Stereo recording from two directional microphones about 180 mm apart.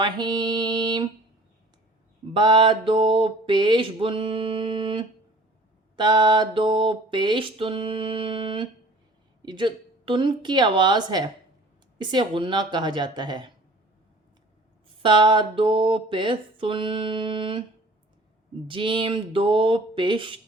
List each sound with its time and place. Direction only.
0.0 s mantra: 25° right (ahead or behind)
2.3 s mantra: 25° right (ahead or behind)
15.0 s mantra: 25° right (ahead or behind)
18.7 s mantra: 25° right (ahead or behind)